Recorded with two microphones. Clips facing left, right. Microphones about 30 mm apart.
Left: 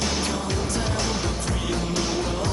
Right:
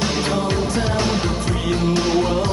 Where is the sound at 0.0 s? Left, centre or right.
Right.